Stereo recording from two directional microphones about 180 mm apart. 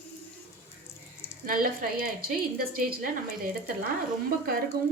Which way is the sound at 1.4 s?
50° right (ahead or behind).